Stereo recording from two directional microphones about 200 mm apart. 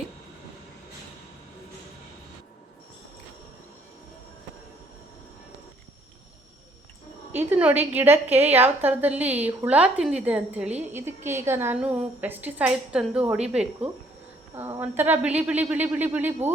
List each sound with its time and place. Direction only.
7.3 s a woman's voice: 10° right (ahead or behind)